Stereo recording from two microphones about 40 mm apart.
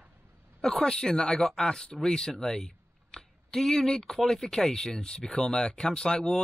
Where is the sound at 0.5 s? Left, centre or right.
Centre.